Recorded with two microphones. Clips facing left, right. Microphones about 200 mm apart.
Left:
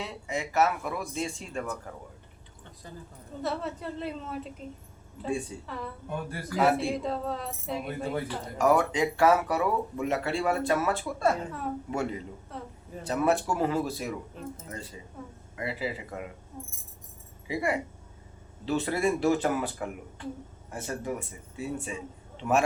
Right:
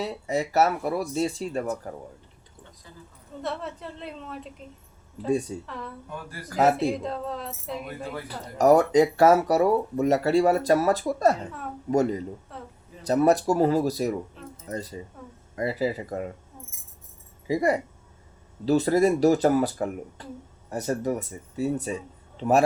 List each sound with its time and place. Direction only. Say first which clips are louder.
0.0 s speech: right 7 dB; 40° right (ahead or behind)
3.4 s a woman's voice: left 1 dB; centre (ahead or behind)
5.3 s speech: right 7 dB; 40° right (ahead or behind)
5.6 s a woman's voice: even; centre (ahead or behind)
6.5 s speech: right 3 dB; 40° right (ahead or behind)
6.9 s a woman's voice: even; centre (ahead or behind)
8.3 s speech: right 7 dB; 40° right (ahead or behind)
12.5 s a woman's voice: left 1 dB; centre (ahead or behind)
13.1 s speech: right 6 dB; 40° right (ahead or behind)
17.5 s a man's voice: right 6 dB; 40° right (ahead or behind)